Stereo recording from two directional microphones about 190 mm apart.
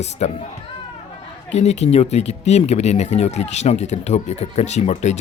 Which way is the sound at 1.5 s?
35° left (ahead or behind).